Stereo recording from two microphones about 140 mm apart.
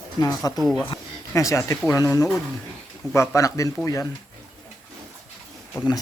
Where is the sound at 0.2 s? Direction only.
25° left (ahead or behind).